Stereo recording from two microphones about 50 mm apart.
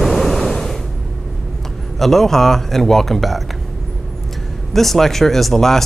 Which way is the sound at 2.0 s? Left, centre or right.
Centre.